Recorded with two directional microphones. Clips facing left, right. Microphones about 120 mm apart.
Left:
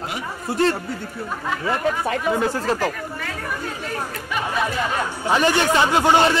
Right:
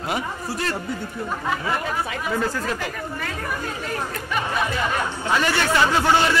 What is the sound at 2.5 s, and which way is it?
Speech, 35° left (ahead or behind).